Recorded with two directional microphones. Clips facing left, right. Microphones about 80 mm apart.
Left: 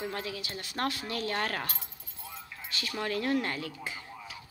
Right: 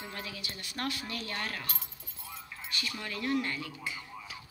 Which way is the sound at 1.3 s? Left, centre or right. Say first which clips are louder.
Left 6 dB; left.